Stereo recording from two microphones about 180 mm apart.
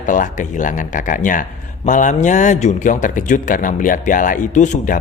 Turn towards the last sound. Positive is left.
turn(degrees=45)  # may be behind; listen again after turning